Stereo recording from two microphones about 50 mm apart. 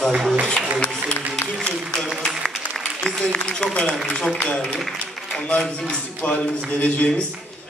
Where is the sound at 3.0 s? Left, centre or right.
Centre.